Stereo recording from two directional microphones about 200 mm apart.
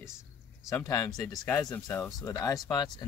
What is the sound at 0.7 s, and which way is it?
Speech, 15° left (ahead or behind).